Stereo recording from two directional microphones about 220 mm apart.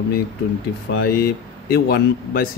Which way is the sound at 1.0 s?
45° left (ahead or behind).